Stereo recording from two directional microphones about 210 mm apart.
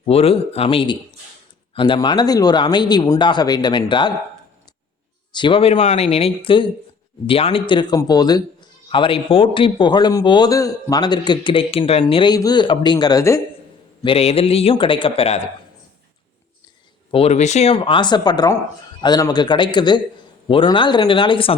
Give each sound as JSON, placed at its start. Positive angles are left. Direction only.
{"t": 0.0, "sound": "a man's voice", "side_deg": 30}
{"t": 5.3, "sound": "a man's voice", "side_deg": 25}
{"t": 14.0, "sound": "a man's voice", "side_deg": 25}
{"t": 17.1, "sound": "a man's voice", "side_deg": 30}